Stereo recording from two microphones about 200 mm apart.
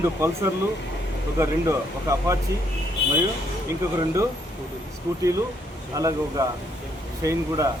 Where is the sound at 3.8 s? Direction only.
15° right (ahead or behind).